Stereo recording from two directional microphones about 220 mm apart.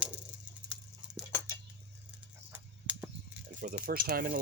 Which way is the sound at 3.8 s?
40° right (ahead or behind).